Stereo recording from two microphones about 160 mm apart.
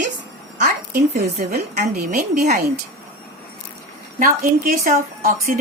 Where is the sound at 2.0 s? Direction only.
70° right (ahead or behind).